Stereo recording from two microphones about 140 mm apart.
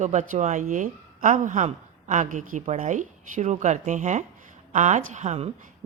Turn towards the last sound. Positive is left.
turn(degrees=-50)  # may be behind; listen again after turning